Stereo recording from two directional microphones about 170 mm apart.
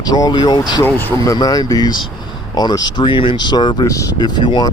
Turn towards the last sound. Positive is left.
turn(degrees=25)  # may be behind; listen again after turning